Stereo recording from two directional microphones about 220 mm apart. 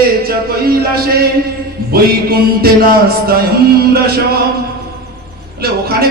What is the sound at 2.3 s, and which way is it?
A man's voice, 45° right (ahead or behind).